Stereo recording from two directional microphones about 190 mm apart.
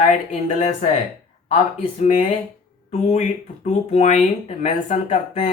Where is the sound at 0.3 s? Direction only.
35° left (ahead or behind).